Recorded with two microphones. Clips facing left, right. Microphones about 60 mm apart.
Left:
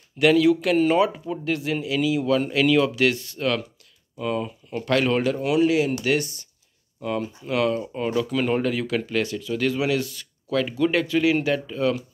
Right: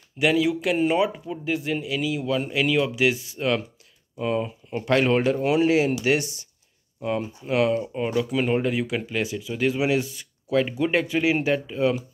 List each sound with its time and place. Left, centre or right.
0.2 s speech: centre; by 5.9 s right
7.0 s speech: right